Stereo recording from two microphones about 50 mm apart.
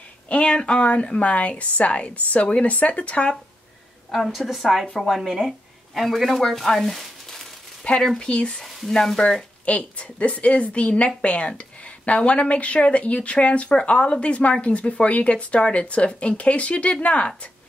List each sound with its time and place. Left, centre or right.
0.3 s speech: left
4.1 s a woman's voice: centre
7.8 s speech: centre
8.6 s speech: centre
9.7 s speech: left